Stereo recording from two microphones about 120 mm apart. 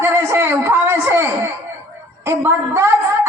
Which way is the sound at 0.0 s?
20° right (ahead or behind).